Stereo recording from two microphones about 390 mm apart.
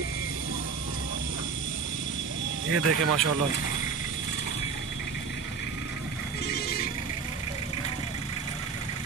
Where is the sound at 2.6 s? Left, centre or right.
Right.